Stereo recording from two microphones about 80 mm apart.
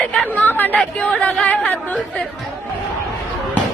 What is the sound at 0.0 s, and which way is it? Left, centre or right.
Speech, centre.